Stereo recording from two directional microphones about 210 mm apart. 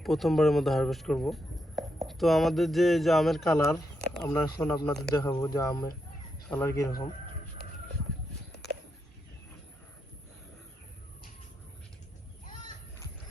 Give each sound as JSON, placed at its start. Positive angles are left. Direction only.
{"t": 0.0, "sound": "speech", "side_deg": 0}
{"t": 4.2, "sound": "speech", "side_deg": 15}